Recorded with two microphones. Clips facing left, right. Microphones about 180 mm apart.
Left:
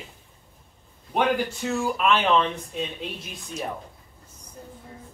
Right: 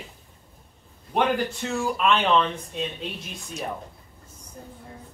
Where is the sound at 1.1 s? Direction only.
Centre (ahead or behind).